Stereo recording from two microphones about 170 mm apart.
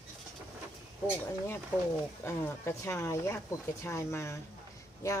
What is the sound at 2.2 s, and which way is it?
Speech, 15° left (ahead or behind).